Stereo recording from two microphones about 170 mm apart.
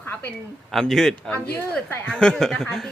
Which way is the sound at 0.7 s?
Centre (ahead or behind).